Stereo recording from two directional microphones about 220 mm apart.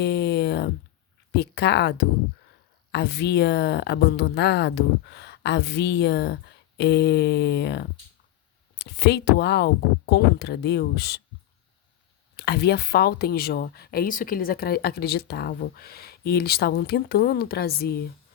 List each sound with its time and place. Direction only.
0.0 s a sound: 50° left (ahead or behind)
1.3 s speech: 50° left (ahead or behind)
12.4 s speech: 50° left (ahead or behind)